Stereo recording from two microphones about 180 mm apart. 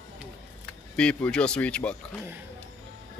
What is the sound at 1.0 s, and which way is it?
Speech, 5° left (ahead or behind).